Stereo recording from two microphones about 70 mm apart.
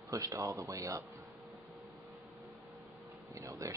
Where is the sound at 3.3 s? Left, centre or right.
Right.